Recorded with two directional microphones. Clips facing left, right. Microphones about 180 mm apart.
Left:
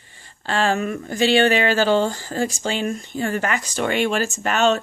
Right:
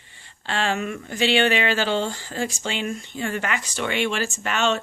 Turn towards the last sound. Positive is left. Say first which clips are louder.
# left 5 dB
turn(degrees=40)  # may be behind; listen again after turning